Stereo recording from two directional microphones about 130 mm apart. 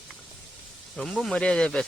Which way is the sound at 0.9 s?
Centre (ahead or behind).